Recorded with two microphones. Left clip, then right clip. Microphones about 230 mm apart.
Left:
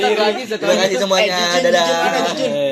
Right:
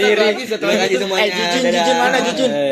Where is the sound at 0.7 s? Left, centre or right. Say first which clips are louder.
Left 1 dB; left.